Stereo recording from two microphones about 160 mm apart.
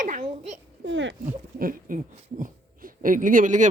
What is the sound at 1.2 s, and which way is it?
Speech, 60° right (ahead or behind).